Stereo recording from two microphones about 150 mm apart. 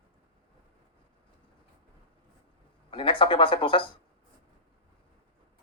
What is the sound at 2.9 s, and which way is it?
Speech, 35° left (ahead or behind).